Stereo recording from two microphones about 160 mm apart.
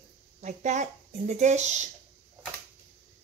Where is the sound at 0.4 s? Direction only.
50° right (ahead or behind).